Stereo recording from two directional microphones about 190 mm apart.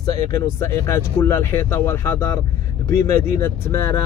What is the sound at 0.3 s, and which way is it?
Speech, 15° left (ahead or behind).